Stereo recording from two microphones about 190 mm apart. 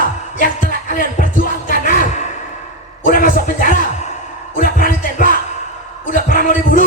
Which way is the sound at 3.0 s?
45° left (ahead or behind).